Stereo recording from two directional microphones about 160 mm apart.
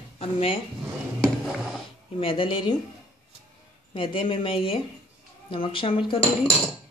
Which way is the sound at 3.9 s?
30° left (ahead or behind).